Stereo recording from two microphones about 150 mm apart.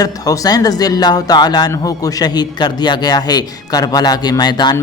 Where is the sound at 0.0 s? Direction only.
25° left (ahead or behind).